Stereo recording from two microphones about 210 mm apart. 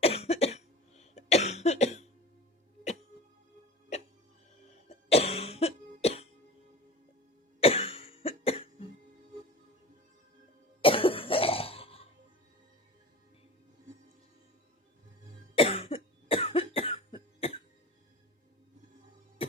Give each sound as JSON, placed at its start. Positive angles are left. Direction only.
{"t": 0.0, "sound": "cough", "side_deg": 30}
{"t": 4.9, "sound": "cough", "side_deg": 30}
{"t": 7.6, "sound": "cough", "side_deg": 30}
{"t": 10.8, "sound": "cough", "side_deg": 25}
{"t": 15.5, "sound": "cough", "side_deg": 25}